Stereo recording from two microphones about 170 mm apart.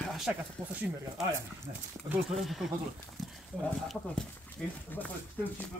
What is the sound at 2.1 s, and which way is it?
Speech, centre (ahead or behind).